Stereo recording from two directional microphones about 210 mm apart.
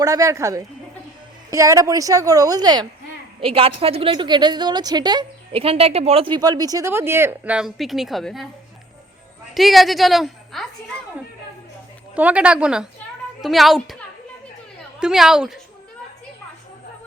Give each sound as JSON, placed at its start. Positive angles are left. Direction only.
{"t": 0.0, "sound": "a woman's voice", "side_deg": -15}
{"t": 9.6, "sound": "a woman's voice", "side_deg": 0}
{"t": 12.1, "sound": "a woman's voice", "side_deg": -5}
{"t": 14.9, "sound": "a woman's voice", "side_deg": -5}